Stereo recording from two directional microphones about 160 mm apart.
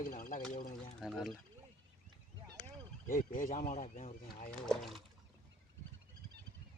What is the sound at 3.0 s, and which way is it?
Speech, 60° left (ahead or behind).